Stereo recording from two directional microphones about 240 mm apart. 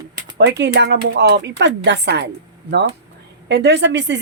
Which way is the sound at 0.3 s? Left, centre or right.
Right.